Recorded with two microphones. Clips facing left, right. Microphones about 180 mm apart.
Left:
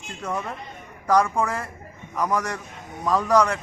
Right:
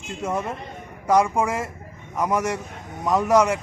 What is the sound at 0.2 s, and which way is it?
Speech, 25° right (ahead or behind).